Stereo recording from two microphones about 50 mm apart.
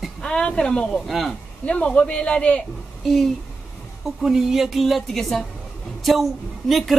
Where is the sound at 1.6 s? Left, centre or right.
Left.